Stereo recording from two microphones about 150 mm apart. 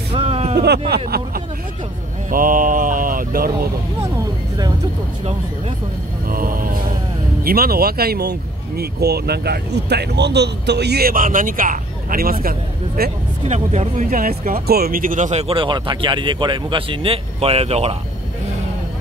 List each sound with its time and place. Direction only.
0.1 s a sound: 45° right (ahead or behind)
0.6 s speech: 90° right
2.3 s mantra: 65° right (ahead or behind)
6.2 s mantra: 70° right (ahead or behind)
7.4 s speech: 85° right
13.5 s speech: 50° right (ahead or behind)
14.1 s speech: 70° right (ahead or behind); by 17.9 s 45° right (ahead or behind)